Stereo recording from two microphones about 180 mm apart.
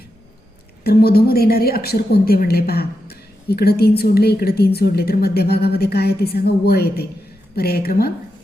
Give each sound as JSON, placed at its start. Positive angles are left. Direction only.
{"t": 0.9, "sound": "a woman's voice", "side_deg": 60}